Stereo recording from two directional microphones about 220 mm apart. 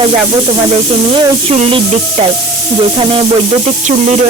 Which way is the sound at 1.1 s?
25° right (ahead or behind).